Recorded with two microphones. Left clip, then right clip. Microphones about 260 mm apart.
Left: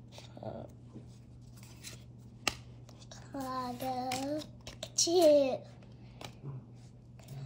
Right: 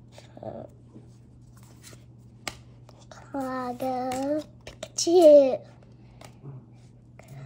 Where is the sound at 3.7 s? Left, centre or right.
Centre.